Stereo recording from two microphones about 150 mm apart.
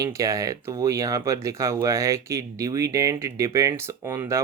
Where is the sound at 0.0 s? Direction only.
20° right (ahead or behind).